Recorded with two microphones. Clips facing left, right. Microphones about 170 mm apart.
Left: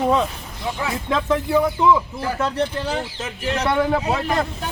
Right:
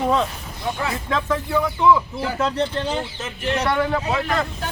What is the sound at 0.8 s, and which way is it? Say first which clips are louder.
Speech: left 3 dB; 20° left (ahead or behind).